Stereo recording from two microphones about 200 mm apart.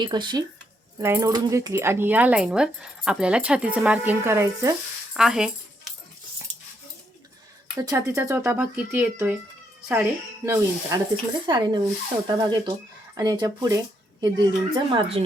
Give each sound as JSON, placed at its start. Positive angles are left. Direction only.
{"t": 0.0, "sound": "a woman's voice", "side_deg": -20}
{"t": 5.1, "sound": "a sound", "side_deg": -5}
{"t": 7.8, "sound": "a woman's voice", "side_deg": -15}